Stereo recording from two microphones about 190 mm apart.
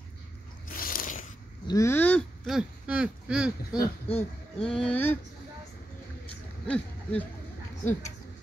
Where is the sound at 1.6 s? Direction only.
15° left (ahead or behind); by 3.8 s 5° right (ahead or behind).